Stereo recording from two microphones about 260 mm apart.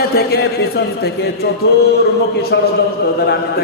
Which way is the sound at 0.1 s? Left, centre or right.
Left.